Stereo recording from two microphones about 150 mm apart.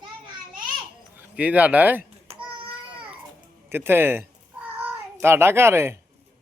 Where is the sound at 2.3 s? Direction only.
40° right (ahead or behind).